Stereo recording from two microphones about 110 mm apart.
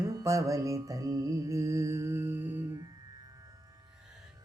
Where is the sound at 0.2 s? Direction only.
30° right (ahead or behind).